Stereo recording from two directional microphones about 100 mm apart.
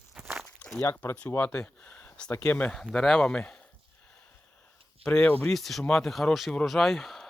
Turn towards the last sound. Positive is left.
turn(degrees=0)  # may be behind; listen again after turning